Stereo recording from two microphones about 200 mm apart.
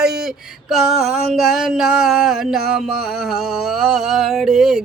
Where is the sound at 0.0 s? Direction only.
Centre (ahead or behind).